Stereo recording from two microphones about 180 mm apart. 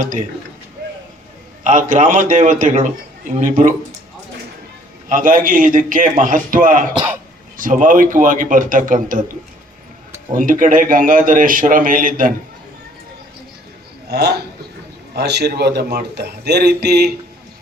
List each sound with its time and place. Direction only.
0.0 s a man's voice: 45° right (ahead or behind)
1.6 s a man's voice: 45° right (ahead or behind)
5.0 s a man's voice: 50° right (ahead or behind)
10.3 s a man's voice: 45° right (ahead or behind)
14.1 s a man's voice: 65° right (ahead or behind)